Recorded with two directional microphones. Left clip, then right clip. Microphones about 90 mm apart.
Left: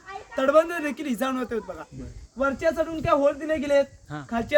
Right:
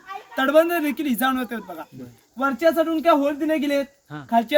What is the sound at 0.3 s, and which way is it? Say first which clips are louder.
A man's voice: right 3 dB; 30° left (ahead or behind).